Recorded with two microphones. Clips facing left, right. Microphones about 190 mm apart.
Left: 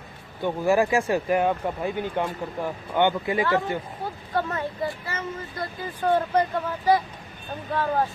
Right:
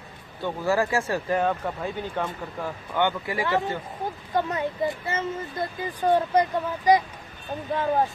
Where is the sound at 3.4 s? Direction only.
20° right (ahead or behind).